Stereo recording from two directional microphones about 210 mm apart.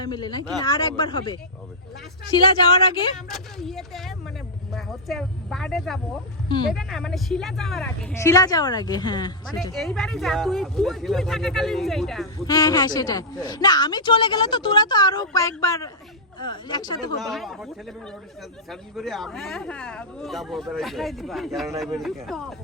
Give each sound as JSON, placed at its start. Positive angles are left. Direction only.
{"t": 0.0, "sound": "a woman's voice", "side_deg": 20}
{"t": 3.2, "sound": "speech", "side_deg": 0}
{"t": 8.2, "sound": "a woman's voice", "side_deg": 15}
{"t": 9.7, "sound": "speech", "side_deg": 0}
{"t": 12.5, "sound": "a woman's voice", "side_deg": 15}
{"t": 17.2, "sound": "speech", "side_deg": 0}